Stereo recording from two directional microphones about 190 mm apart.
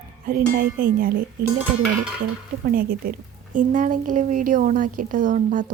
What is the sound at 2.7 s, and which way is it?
Speech, 50° right (ahead or behind).